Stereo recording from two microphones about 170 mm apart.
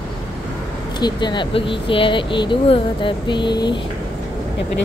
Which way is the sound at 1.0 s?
25° left (ahead or behind).